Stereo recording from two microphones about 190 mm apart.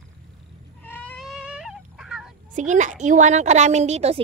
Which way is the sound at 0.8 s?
10° left (ahead or behind).